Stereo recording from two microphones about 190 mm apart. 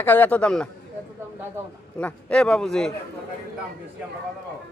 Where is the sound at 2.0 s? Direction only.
5° left (ahead or behind).